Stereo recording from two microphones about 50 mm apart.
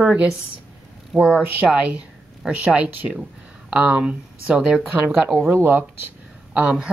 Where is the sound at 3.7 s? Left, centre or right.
Right.